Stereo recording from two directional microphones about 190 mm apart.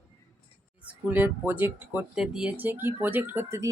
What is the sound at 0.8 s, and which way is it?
Speech, 10° right (ahead or behind).